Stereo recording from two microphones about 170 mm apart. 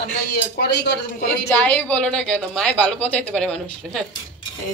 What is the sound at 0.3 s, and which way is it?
Speech, 70° left (ahead or behind).